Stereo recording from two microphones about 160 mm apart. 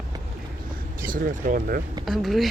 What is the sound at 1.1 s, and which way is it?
Speech, 60° right (ahead or behind).